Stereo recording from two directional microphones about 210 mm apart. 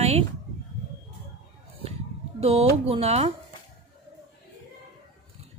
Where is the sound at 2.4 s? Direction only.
30° right (ahead or behind).